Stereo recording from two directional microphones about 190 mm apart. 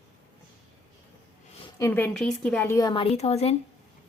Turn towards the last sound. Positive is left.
turn(degrees=35)  # may be behind; listen again after turning